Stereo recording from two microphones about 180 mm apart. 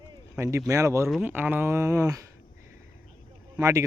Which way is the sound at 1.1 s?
5° right (ahead or behind).